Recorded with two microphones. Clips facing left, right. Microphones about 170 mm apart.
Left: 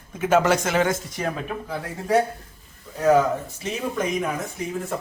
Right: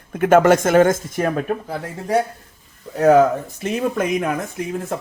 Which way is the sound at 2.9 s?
60° right (ahead or behind).